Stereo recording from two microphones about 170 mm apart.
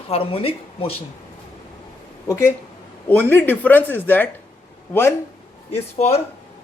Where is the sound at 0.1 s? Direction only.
35° left (ahead or behind).